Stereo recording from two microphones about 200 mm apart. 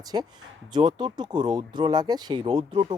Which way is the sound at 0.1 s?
25° right (ahead or behind).